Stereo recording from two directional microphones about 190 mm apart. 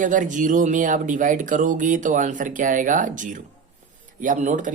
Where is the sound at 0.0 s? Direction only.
40° right (ahead or behind).